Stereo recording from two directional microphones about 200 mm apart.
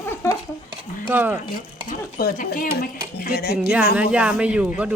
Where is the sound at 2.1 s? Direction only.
45° left (ahead or behind).